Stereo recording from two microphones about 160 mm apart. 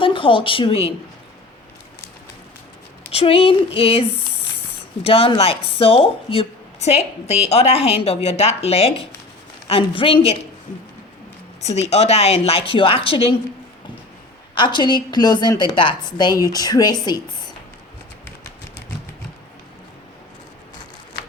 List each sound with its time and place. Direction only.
0.0 s speech: 30° left (ahead or behind)
3.1 s a woman's voice: 35° left (ahead or behind)
11.6 s a woman's voice: 40° left (ahead or behind)
14.5 s a woman's voice: 30° left (ahead or behind)